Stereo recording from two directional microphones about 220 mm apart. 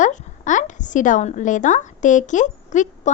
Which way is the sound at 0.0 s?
35° left (ahead or behind).